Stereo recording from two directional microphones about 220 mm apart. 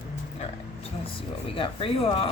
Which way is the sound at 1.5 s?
25° left (ahead or behind).